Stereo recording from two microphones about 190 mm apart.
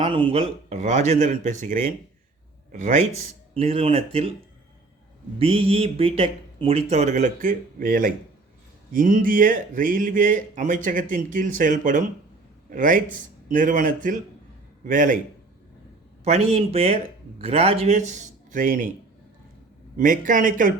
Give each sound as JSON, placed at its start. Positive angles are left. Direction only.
{"t": 0.0, "sound": "speech", "side_deg": -25}
{"t": 5.4, "sound": "speech", "side_deg": -30}
{"t": 16.2, "sound": "speech", "side_deg": -35}
{"t": 20.0, "sound": "speech", "side_deg": -45}